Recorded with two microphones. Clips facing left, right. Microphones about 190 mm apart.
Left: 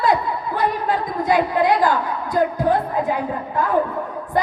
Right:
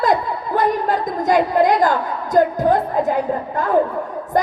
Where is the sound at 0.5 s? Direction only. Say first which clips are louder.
Right 4 dB; 45° right (ahead or behind).